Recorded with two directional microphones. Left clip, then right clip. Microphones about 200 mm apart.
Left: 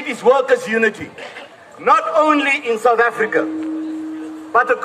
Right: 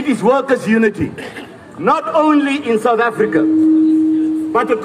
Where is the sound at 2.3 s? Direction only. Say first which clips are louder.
Right 1 dB; 25° left (ahead or behind).